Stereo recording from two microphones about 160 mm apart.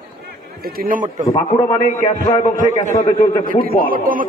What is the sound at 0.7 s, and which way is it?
Speech, 65° right (ahead or behind).